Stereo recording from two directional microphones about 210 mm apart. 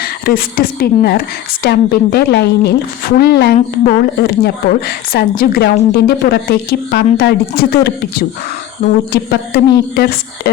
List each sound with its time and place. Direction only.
0.0 s a woman's voice: 45° left (ahead or behind)
9.1 s a woman's voice: 50° left (ahead or behind)